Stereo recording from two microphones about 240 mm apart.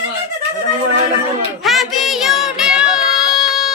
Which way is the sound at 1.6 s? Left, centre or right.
Centre.